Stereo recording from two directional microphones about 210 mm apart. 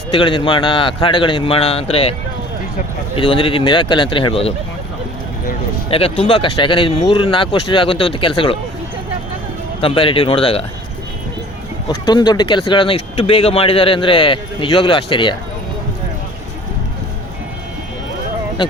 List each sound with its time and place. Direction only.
0.1 s speech: 25° left (ahead or behind)
3.2 s speech: 25° left (ahead or behind)
5.9 s speech: 25° left (ahead or behind)
9.8 s speech: 25° left (ahead or behind)
11.9 s speech: 20° left (ahead or behind)